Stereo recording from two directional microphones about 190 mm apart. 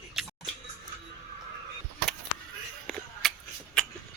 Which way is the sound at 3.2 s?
Centre (ahead or behind).